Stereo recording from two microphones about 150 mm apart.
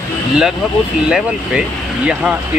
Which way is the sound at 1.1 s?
5° right (ahead or behind).